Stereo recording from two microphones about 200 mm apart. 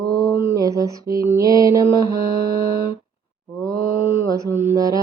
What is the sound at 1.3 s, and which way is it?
Music, 15° right (ahead or behind).